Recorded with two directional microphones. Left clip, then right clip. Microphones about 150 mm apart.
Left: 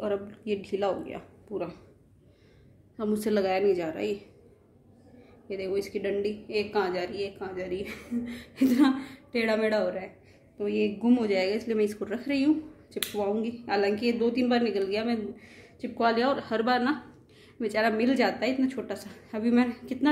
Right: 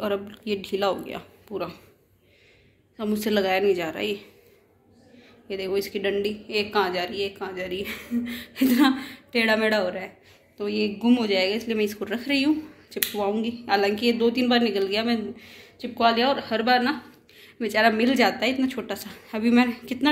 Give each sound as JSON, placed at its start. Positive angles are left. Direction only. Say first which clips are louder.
{"t": 0.0, "sound": "a woman's voice", "louder": "right 3 dB", "side_deg": 0}
{"t": 3.0, "sound": "a woman's voice", "louder": "right 3 dB", "side_deg": 20}
{"t": 5.5, "sound": "a woman's voice", "louder": "right 4 dB", "side_deg": 5}
{"t": 12.1, "sound": "a woman's voice", "louder": "right 3 dB", "side_deg": 10}
{"t": 15.5, "sound": "speech", "louder": "right 2 dB", "side_deg": 20}
{"t": 17.4, "sound": "a woman's voice", "louder": "right 5 dB", "side_deg": 10}